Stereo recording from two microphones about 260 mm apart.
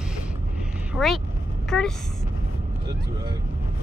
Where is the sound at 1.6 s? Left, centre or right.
Centre.